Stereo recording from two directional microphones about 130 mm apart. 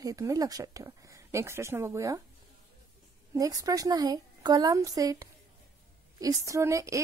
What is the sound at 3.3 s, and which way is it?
A woman's voice, 25° right (ahead or behind).